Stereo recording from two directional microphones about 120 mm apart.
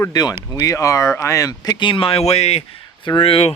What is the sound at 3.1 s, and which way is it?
Speech, 50° left (ahead or behind).